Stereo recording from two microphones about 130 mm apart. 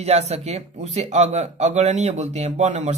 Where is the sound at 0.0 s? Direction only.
55° right (ahead or behind).